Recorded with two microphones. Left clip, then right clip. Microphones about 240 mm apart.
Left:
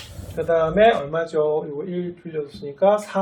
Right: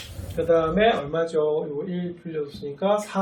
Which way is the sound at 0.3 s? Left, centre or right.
Centre.